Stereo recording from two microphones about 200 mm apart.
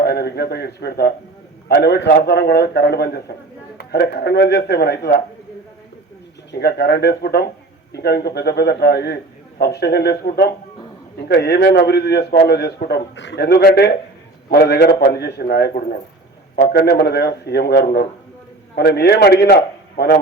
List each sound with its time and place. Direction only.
0.0 s a man's voice: 55° left (ahead or behind)
6.5 s a man's voice: 55° left (ahead or behind)